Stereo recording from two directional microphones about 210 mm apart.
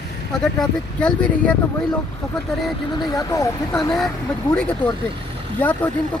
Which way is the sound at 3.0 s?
15° left (ahead or behind).